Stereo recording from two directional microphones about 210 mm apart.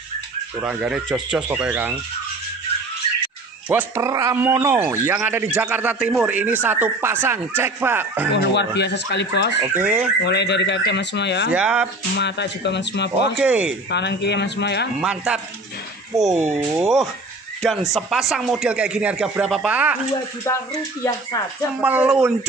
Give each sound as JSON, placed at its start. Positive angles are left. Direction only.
{"t": 0.6, "sound": "speech", "side_deg": -5}
{"t": 3.6, "sound": "speech", "side_deg": -10}
{"t": 8.3, "sound": "speech", "side_deg": 55}
{"t": 9.6, "sound": "speech", "side_deg": -10}
{"t": 10.2, "sound": "speech", "side_deg": 55}
{"t": 11.5, "sound": "speech", "side_deg": -5}
{"t": 12.2, "sound": "speech", "side_deg": 55}
{"t": 13.4, "sound": "speech", "side_deg": -5}
{"t": 13.8, "sound": "speech", "side_deg": 55}
{"t": 15.0, "sound": "speech", "side_deg": -5}
{"t": 20.5, "sound": "speech", "side_deg": 15}
{"t": 21.8, "sound": "speech", "side_deg": -5}